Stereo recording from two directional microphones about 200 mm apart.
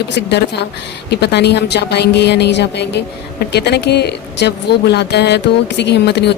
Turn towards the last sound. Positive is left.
turn(degrees=55)  # may be behind; listen again after turning